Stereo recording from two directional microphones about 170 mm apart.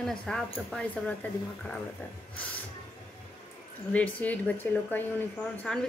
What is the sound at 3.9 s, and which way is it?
A woman's voice, 10° left (ahead or behind).